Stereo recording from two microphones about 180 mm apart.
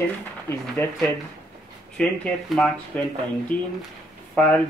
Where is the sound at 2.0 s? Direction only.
Centre (ahead or behind).